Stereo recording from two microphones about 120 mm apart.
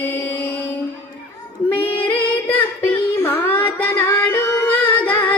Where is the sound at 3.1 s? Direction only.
25° left (ahead or behind).